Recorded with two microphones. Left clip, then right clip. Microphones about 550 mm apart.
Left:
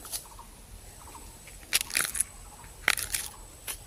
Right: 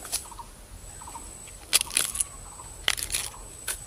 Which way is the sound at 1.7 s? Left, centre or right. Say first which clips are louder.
Right 2 dB; left.